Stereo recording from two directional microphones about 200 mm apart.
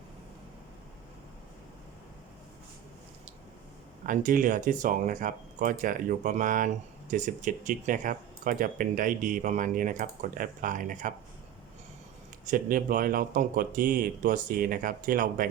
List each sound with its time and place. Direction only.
4.0 s speech: 40° right (ahead or behind)
12.5 s speech: 45° right (ahead or behind)